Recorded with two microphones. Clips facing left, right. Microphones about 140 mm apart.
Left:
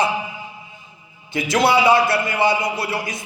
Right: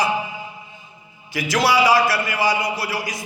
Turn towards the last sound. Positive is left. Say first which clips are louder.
# left 1 dB
turn(degrees=25)  # may be behind; listen again after turning